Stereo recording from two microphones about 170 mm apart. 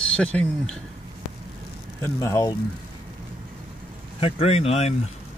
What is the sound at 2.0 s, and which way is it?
Speech, 15° left (ahead or behind).